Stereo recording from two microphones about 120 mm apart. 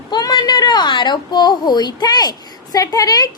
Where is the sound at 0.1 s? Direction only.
35° left (ahead or behind).